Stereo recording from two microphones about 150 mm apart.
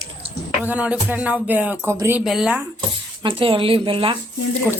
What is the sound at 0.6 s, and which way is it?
Music, 10° right (ahead or behind).